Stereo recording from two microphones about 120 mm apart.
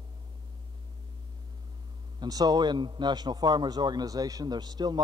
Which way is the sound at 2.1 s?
30° right (ahead or behind).